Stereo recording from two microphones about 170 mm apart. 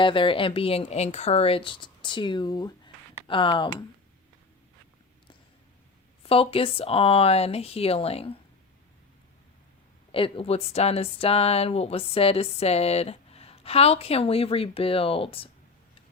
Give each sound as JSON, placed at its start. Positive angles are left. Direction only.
{"t": 0.0, "sound": "speech", "side_deg": 30}
{"t": 6.2, "sound": "speech", "side_deg": 35}
{"t": 10.1, "sound": "speech", "side_deg": 30}